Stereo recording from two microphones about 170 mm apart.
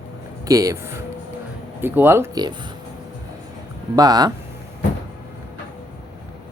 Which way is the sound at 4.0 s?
20° right (ahead or behind).